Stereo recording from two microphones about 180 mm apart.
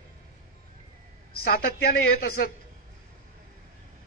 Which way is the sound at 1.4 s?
60° left (ahead or behind).